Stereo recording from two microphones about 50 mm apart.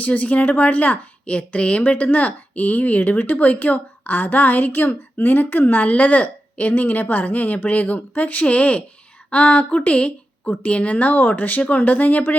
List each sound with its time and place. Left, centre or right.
0.0 s a woman's voice: left